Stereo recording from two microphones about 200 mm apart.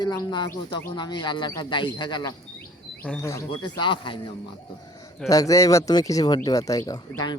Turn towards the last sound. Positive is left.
turn(degrees=20)  # may be behind; listen again after turning